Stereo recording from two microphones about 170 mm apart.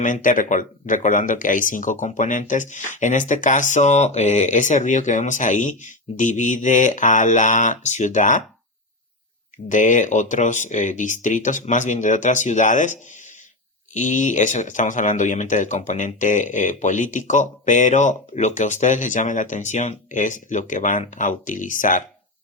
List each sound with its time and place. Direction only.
0.0 s speech: 50° left (ahead or behind)
9.6 s speech: 50° left (ahead or behind)